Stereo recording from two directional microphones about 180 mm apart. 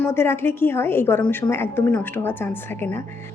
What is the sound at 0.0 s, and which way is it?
A woman's voice, 15° left (ahead or behind).